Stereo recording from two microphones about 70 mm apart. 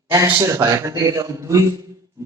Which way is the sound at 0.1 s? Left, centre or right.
Right.